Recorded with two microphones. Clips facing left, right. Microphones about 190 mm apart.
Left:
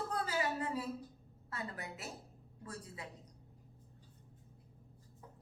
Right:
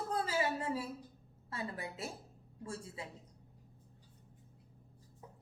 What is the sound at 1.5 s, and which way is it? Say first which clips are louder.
A woman's voice: right 2 dB; 25° right (ahead or behind).